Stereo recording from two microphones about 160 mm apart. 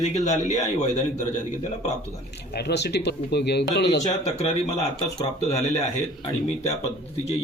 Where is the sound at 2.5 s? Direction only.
90° left.